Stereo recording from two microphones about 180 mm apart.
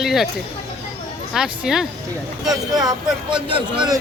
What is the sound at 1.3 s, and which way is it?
Speech, 5° right (ahead or behind).